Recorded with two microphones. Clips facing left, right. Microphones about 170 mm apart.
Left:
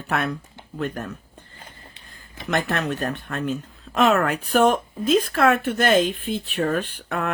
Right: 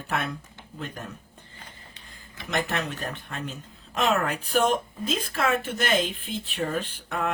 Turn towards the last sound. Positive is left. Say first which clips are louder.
# left 3 dB
turn(degrees=65)  # may be behind; listen again after turning